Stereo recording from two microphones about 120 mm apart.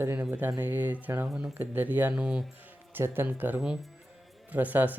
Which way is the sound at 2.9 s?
20° right (ahead or behind).